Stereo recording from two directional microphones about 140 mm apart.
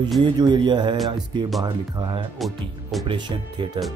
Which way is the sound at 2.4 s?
Centre (ahead or behind).